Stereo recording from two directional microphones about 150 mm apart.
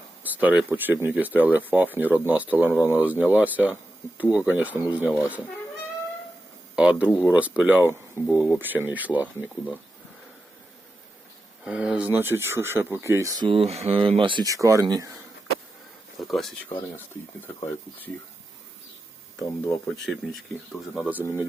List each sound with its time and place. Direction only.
0.2 s speech: 10° right (ahead or behind)
6.7 s speech: 5° right (ahead or behind)
11.6 s speech: 5° right (ahead or behind); by 15.1 s 25° right (ahead or behind)
16.2 s speech: centre (ahead or behind)
17.4 s speech: 10° left (ahead or behind)
20.1 s speech: centre (ahead or behind)
21.1 s speech: 10° right (ahead or behind)